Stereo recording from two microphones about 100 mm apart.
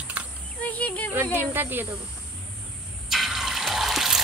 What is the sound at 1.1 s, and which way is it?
Speech, 25° right (ahead or behind).